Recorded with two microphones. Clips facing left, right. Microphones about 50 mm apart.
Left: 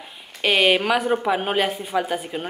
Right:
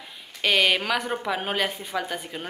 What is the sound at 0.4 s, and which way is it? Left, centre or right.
A woman's voice, left.